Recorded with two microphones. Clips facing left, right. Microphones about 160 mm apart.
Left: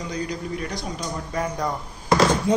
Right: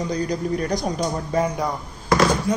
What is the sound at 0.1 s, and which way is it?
Speech, 40° right (ahead or behind).